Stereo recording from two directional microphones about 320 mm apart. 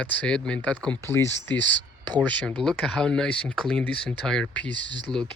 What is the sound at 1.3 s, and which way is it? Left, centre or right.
Speech, left.